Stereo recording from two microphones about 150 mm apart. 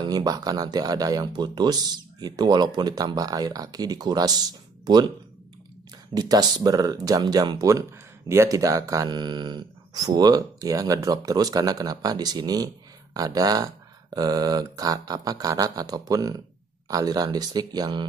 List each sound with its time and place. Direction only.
0.0 s speech: 25° right (ahead or behind)
6.1 s speech: 25° right (ahead or behind)